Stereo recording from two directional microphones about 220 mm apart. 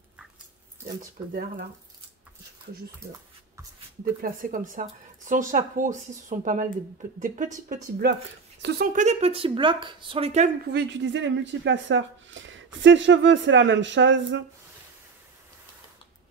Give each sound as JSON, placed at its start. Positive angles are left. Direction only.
{"t": 4.2, "sound": "speech", "side_deg": -40}
{"t": 8.0, "sound": "speech", "side_deg": -50}
{"t": 10.7, "sound": "speech", "side_deg": -50}